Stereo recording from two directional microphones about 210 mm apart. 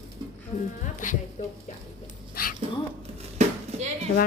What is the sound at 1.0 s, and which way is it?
Speech, 35° left (ahead or behind).